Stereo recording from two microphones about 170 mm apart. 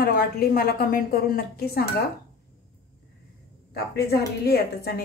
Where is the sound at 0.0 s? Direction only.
65° left (ahead or behind).